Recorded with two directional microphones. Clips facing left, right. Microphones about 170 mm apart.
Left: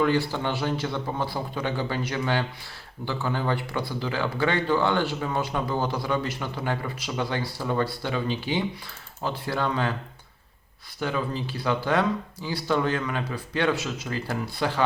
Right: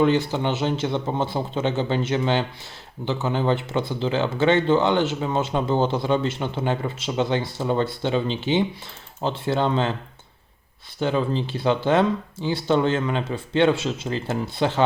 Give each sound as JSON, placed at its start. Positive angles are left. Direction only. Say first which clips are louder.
{"t": 0.0, "sound": "speech", "louder": "right 4 dB", "side_deg": -20}
{"t": 11.0, "sound": "speech", "louder": "right 5 dB", "side_deg": -25}